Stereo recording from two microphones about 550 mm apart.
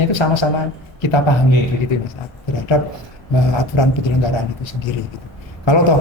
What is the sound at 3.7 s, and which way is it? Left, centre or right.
Speech, left.